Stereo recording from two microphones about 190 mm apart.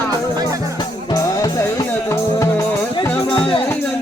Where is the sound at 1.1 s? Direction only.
20° left (ahead or behind).